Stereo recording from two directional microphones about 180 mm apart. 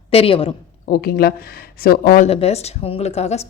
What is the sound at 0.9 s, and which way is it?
Speech, 55° left (ahead or behind).